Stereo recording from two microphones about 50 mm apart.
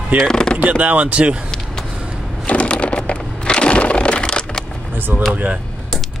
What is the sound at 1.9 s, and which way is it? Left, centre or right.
Vehicle, right.